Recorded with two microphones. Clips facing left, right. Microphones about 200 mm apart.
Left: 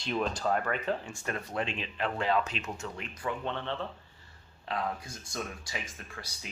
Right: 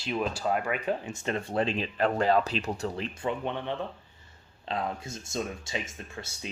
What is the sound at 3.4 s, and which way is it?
Speech, 15° right (ahead or behind).